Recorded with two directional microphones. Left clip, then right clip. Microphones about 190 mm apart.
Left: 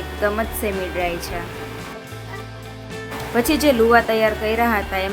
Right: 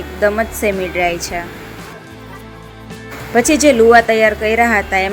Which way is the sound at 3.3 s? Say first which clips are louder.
Right 6 dB; 20° right (ahead or behind).